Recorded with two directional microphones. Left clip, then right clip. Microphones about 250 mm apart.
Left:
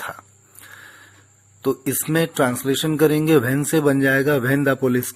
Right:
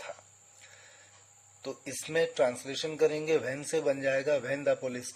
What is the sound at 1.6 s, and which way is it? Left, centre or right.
Speech, centre.